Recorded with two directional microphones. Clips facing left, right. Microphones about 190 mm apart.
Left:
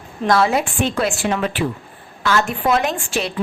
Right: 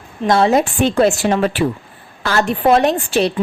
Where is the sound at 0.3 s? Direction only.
30° right (ahead or behind).